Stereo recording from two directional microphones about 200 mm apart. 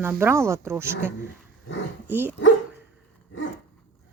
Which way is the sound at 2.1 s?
10° right (ahead or behind).